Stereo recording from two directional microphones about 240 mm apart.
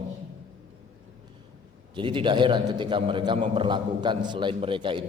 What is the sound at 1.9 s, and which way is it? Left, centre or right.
A man's voice, right.